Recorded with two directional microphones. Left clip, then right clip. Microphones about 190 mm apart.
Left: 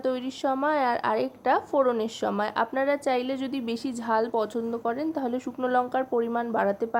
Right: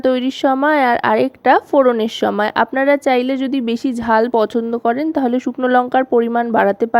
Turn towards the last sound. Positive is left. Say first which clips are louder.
# right 11 dB
turn(degrees=-40)  # may be behind; listen again after turning